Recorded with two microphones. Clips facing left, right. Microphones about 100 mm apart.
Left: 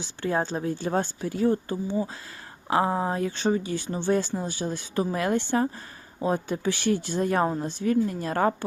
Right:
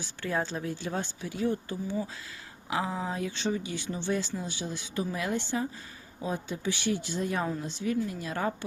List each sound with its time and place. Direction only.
0.0 s a woman's voice: 30° left (ahead or behind); by 1.5 s 45° left (ahead or behind)
1.7 s speech: 25° left (ahead or behind)
2.6 s speech: 55° left (ahead or behind)